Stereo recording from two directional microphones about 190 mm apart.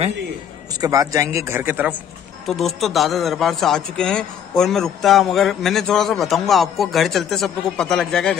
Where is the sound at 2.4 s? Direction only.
Centre (ahead or behind).